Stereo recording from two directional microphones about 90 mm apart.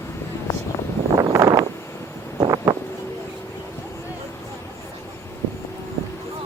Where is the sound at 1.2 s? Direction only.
40° right (ahead or behind).